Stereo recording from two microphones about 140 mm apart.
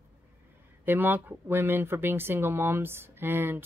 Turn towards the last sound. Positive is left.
turn(degrees=-15)  # may be behind; listen again after turning